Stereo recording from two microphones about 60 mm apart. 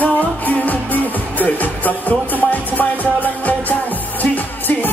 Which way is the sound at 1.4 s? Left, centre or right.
Left.